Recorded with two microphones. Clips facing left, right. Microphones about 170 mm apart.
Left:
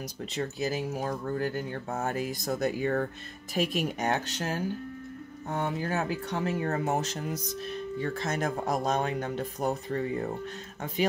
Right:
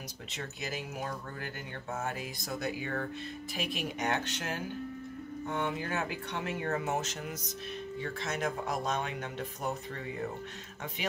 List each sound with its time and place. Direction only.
0.3 s speech: 35° left (ahead or behind)